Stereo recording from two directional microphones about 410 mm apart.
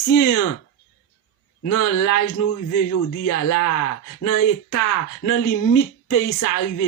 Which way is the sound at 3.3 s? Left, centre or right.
Left.